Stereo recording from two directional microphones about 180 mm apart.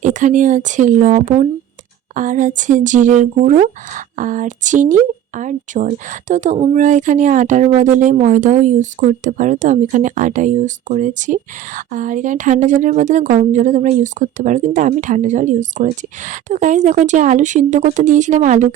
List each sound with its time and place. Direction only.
0.0 s speech: 45° right (ahead or behind)